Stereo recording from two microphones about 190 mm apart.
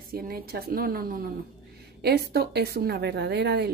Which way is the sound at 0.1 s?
50° right (ahead or behind).